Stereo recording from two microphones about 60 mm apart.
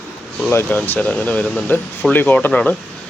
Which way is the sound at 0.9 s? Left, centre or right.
Centre.